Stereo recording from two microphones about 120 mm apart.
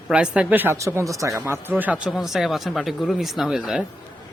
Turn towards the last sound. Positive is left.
turn(degrees=-5)  # may be behind; listen again after turning